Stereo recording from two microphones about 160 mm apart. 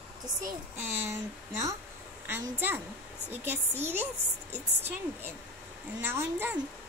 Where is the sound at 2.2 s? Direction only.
15° right (ahead or behind).